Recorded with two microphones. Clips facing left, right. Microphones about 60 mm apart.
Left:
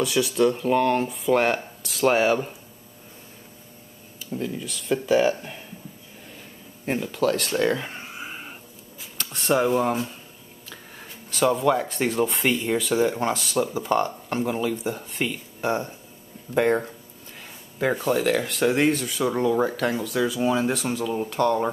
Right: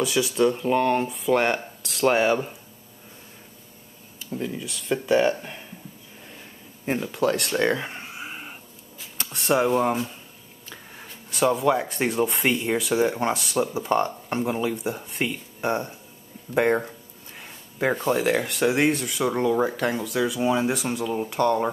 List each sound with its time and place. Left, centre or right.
0.0 s speech: centre
4.3 s speech: centre
7.6 s a sound: centre
9.3 s speech: centre
17.4 s a sound: centre
17.9 s speech: centre